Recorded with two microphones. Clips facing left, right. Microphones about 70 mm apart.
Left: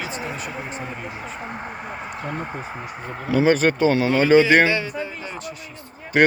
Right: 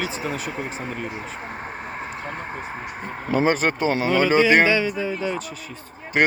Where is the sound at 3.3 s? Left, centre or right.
Right.